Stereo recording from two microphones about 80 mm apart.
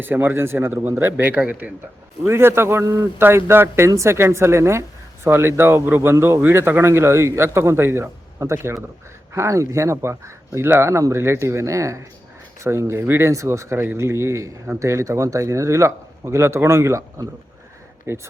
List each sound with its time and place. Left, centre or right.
0.0 s a man's voice: right
2.2 s a woman's voice: right
3.2 s a woman's voice: right